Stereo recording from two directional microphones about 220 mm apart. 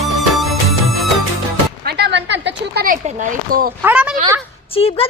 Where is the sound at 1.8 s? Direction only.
50° right (ahead or behind).